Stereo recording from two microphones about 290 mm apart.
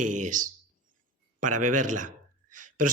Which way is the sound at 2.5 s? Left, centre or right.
Right.